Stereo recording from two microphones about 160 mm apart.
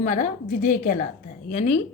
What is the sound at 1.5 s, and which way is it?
Speech, 45° left (ahead or behind).